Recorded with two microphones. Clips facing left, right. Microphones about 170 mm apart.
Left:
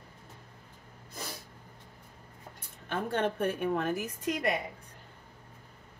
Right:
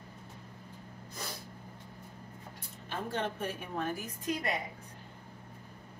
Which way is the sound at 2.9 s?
60° left (ahead or behind).